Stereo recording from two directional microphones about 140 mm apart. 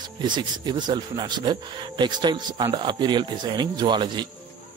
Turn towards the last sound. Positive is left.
turn(degrees=-30)  # may be behind; listen again after turning